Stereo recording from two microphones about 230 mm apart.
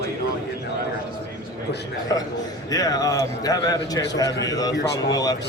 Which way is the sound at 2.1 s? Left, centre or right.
Centre.